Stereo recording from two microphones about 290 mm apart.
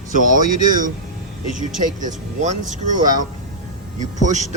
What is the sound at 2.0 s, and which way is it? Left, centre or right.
Speech, right.